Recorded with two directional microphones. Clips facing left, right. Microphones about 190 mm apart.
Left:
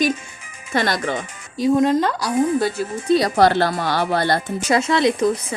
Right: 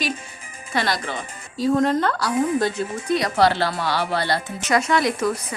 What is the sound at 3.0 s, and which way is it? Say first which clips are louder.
Speech: left 6 dB; 30° left (ahead or behind).